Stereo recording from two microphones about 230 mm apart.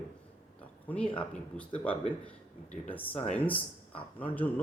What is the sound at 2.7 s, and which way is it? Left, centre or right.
Speech, centre.